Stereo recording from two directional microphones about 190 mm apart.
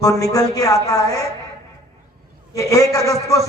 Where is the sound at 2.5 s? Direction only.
15° left (ahead or behind).